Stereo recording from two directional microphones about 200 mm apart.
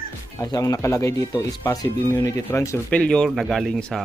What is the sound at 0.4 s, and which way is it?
Speech, 20° left (ahead or behind).